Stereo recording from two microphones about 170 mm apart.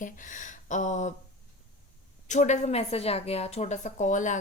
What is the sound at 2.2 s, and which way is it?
A woman's voice, 45° left (ahead or behind).